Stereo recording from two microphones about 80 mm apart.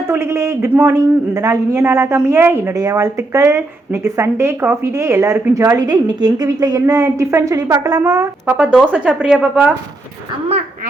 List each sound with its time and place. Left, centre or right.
0.1 s a man's voice: right
1.8 s speech: right
2.7 s speech: right
8.4 s speech: centre